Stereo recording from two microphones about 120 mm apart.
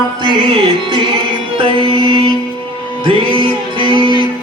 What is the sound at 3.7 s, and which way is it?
Music, 45° right (ahead or behind).